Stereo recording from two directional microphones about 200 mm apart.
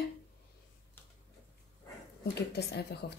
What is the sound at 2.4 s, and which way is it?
Speech, 55° left (ahead or behind).